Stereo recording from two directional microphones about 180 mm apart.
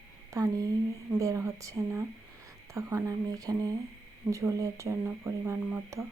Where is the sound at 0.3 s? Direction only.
20° right (ahead or behind).